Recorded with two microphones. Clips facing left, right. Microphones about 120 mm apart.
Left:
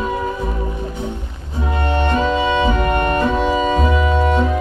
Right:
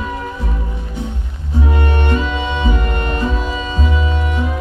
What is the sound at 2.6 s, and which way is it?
Music, 50° left (ahead or behind).